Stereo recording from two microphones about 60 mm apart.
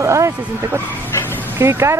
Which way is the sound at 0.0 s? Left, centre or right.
Right.